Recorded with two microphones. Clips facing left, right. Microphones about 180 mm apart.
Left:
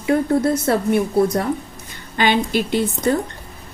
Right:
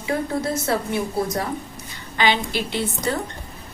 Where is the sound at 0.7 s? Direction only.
55° left (ahead or behind).